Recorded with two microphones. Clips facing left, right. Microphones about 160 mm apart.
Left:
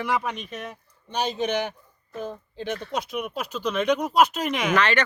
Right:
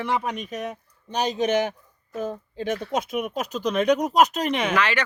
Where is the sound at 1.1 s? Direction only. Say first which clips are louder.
Right 3 dB; centre (ahead or behind).